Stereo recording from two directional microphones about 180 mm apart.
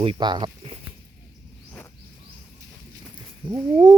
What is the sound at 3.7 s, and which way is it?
Speech, 20° right (ahead or behind).